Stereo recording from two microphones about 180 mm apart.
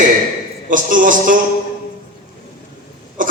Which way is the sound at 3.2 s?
50° right (ahead or behind).